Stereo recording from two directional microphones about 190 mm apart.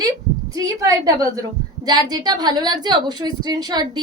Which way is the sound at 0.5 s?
15° right (ahead or behind).